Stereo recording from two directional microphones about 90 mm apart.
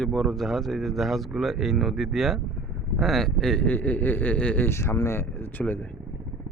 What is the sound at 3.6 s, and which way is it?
Speech, 20° left (ahead or behind).